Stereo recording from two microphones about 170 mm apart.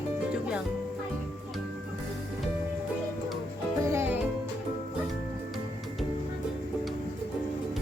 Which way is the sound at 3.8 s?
15° right (ahead or behind).